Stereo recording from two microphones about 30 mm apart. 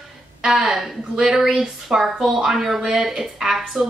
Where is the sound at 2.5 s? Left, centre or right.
Centre.